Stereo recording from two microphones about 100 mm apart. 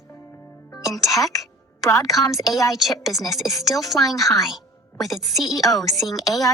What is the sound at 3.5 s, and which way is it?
Speech, 35° left (ahead or behind).